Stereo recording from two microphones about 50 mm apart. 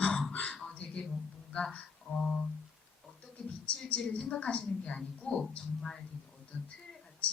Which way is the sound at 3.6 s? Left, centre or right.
Left.